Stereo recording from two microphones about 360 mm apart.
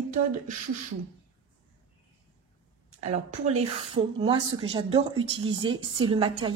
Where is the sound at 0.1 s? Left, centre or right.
Right.